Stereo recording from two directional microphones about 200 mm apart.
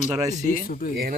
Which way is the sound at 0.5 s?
45° left (ahead or behind).